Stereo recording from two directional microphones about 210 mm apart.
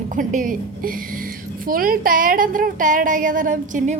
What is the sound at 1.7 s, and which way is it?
A woman's voice, 45° right (ahead or behind).